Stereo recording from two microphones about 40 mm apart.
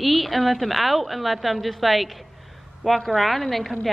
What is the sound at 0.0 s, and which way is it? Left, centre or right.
A woman's voice, centre.